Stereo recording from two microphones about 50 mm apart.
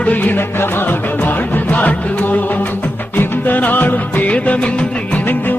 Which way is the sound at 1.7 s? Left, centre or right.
Left.